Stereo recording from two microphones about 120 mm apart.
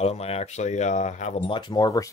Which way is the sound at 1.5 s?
40° left (ahead or behind).